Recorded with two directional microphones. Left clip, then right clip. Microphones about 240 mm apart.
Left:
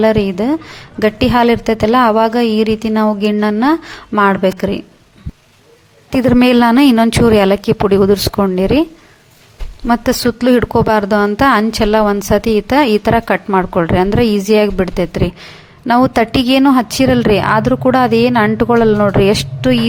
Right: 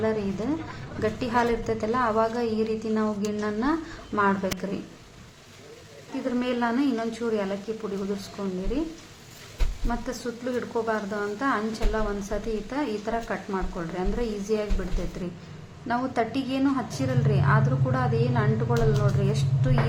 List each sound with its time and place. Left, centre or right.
0.0 s a woman's voice: left
6.4 s a woman's voice: left
9.8 s a woman's voice: left